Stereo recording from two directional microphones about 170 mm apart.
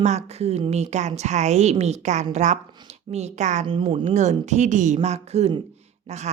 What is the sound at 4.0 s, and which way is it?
A woman's voice, 45° right (ahead or behind).